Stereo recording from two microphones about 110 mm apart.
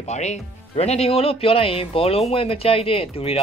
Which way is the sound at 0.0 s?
90° left.